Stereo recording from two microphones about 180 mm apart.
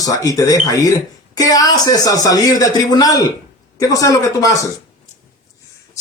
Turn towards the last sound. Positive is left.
turn(degrees=20)  # may be behind; listen again after turning